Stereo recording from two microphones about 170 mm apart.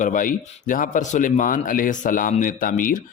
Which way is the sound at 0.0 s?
55° left (ahead or behind).